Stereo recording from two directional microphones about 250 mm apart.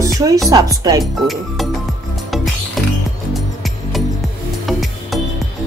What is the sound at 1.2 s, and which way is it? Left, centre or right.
Speech, centre.